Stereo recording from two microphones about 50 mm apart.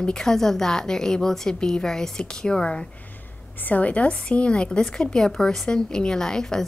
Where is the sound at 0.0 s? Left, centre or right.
Centre.